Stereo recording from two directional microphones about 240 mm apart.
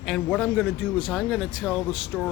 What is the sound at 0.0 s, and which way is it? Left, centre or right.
Speech, centre.